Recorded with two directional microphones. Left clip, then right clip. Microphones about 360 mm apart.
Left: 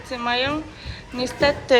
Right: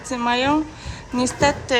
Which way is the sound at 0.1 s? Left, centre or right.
Centre.